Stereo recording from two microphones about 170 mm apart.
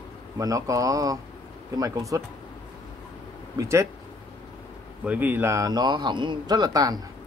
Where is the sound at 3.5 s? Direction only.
20° right (ahead or behind).